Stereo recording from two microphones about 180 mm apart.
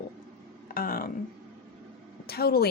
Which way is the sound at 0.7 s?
55° left (ahead or behind).